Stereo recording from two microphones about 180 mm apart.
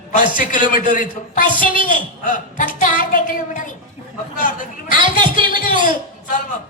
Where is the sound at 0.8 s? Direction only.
45° left (ahead or behind).